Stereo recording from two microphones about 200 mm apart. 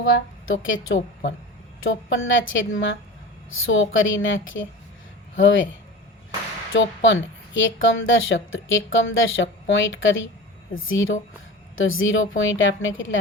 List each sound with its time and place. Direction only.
0.0 s a woman's voice: 85° left
6.7 s a woman's voice: 70° left (ahead or behind)